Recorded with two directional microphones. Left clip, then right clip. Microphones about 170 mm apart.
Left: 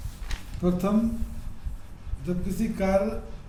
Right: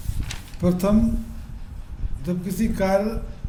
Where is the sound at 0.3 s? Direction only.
55° right (ahead or behind).